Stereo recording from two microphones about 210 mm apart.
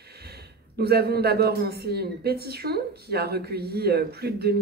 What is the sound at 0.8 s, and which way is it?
A man's voice, 50° right (ahead or behind).